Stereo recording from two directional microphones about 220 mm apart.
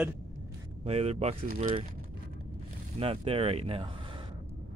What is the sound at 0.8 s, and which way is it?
Speech, 30° right (ahead or behind).